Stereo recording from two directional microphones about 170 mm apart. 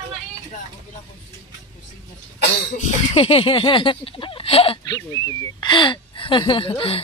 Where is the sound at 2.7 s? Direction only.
40° left (ahead or behind).